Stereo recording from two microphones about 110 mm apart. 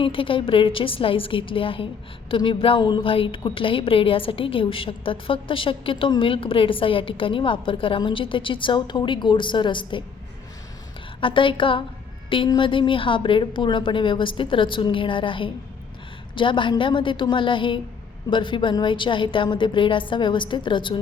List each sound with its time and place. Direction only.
0.0 s a woman's voice: 55° left (ahead or behind)
11.2 s a woman's voice: 50° left (ahead or behind)